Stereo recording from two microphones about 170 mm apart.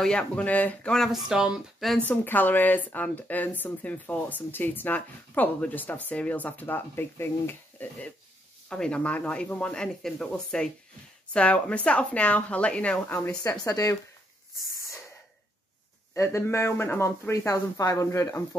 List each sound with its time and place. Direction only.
0.0 s speech: 5° left (ahead or behind)
2.0 s speech: 10° left (ahead or behind)
16.2 s speech: 15° left (ahead or behind)